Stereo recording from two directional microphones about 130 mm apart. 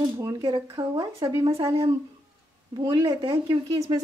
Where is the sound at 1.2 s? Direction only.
30° right (ahead or behind).